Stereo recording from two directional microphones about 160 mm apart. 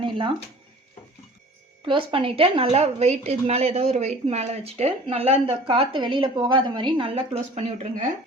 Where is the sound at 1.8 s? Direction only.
30° right (ahead or behind).